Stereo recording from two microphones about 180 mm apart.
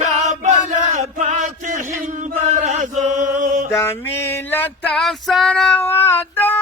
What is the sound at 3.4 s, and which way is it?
Mantra, 45° right (ahead or behind).